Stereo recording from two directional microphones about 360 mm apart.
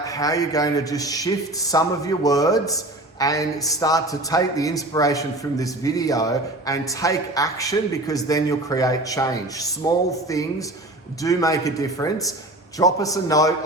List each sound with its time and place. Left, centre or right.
0.1 s a man's voice: centre